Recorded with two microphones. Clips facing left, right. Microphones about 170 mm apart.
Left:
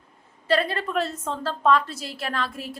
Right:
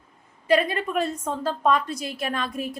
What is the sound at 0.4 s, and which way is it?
A woman's voice, 15° right (ahead or behind).